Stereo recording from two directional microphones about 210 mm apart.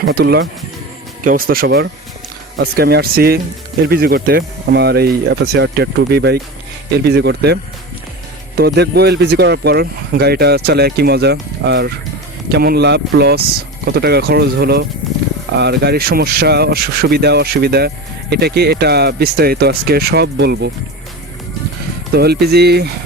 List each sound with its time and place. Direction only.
0.0 s speech: 50° right (ahead or behind)
22.1 s speech: 50° right (ahead or behind)